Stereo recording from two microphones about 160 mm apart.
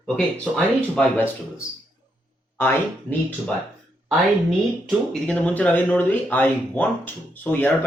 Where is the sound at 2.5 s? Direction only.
15° left (ahead or behind).